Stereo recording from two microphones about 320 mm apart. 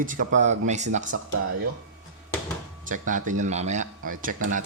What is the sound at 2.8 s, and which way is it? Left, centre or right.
Speech, right.